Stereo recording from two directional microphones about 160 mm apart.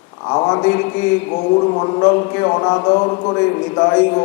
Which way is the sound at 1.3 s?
30° left (ahead or behind).